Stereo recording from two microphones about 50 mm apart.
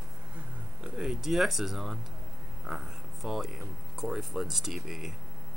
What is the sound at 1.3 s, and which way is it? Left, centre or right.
Speech, centre.